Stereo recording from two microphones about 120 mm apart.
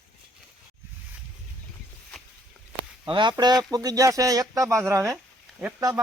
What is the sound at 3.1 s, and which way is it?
Speech, 40° right (ahead or behind).